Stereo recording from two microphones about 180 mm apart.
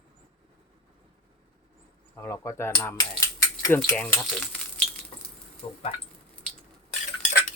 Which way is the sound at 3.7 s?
5° left (ahead or behind).